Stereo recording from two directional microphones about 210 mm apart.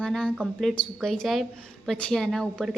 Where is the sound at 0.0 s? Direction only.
5° left (ahead or behind).